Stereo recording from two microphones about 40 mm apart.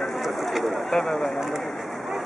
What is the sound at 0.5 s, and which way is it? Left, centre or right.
Speech, centre.